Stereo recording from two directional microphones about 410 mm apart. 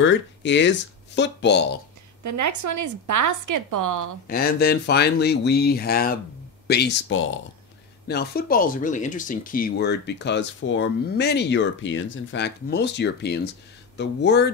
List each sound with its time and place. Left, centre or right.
0.0 s speech: left
2.2 s a woman's voice: right
4.3 s speech: left